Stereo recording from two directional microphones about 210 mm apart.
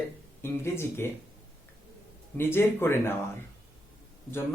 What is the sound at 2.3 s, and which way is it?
Speech, 10° left (ahead or behind).